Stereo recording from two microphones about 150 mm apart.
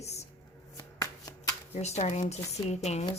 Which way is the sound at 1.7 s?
45° left (ahead or behind).